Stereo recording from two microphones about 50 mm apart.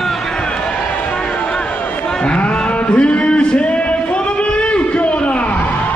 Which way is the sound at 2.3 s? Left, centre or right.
Left.